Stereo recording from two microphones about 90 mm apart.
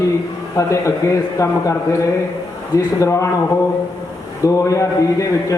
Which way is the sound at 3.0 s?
35° left (ahead or behind).